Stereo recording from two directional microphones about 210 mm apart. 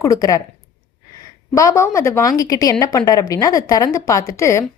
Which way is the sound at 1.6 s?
15° left (ahead or behind).